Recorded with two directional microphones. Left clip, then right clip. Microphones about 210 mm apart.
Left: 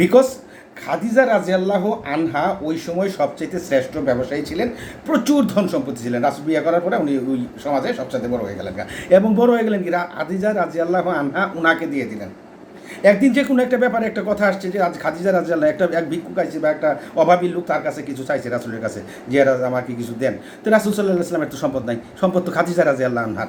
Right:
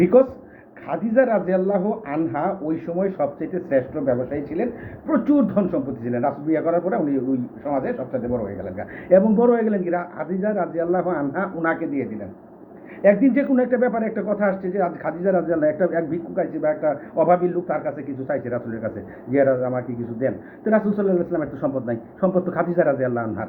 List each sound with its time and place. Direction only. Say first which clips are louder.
0.0 s speech: left 2 dB; 20° left (ahead or behind)